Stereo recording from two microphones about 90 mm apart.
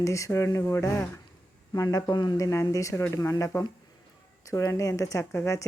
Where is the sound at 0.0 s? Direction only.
35° left (ahead or behind).